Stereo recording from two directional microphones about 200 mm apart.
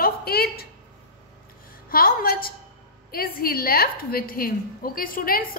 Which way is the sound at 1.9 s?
45° left (ahead or behind).